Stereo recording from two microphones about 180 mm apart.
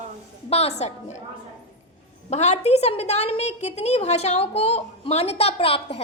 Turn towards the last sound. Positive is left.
turn(degrees=30)  # may be behind; listen again after turning